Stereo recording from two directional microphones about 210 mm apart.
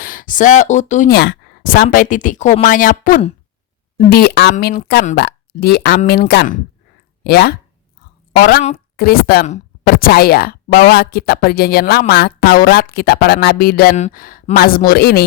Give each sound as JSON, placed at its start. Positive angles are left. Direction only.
{"t": 0.0, "sound": "speech", "side_deg": 40}
{"t": 1.1, "sound": "a woman's voice", "side_deg": 50}
{"t": 3.9, "sound": "speech", "side_deg": 50}
{"t": 4.5, "sound": "speech", "side_deg": 40}